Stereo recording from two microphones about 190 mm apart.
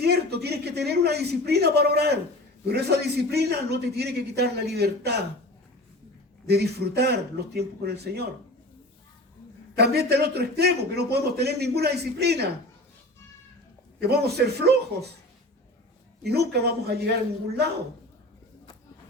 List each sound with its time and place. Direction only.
0.0 s a man's voice: 60° right (ahead or behind)
6.5 s a man's voice: 60° right (ahead or behind)
9.7 s a man's voice: 60° right (ahead or behind)
14.1 s a man's voice: 55° right (ahead or behind)
16.2 s a man's voice: 60° right (ahead or behind)